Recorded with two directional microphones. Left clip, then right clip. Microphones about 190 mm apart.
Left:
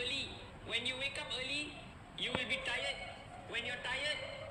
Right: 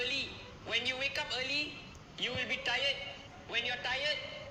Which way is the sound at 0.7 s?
20° left (ahead or behind).